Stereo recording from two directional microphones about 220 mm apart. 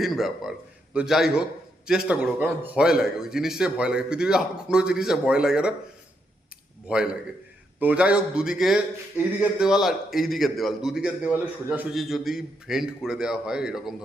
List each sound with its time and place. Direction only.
0.0 s a man's voice: centre (ahead or behind)
6.8 s a man's voice: 5° right (ahead or behind)